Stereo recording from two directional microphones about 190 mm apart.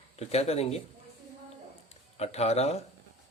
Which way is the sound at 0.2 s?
35° left (ahead or behind).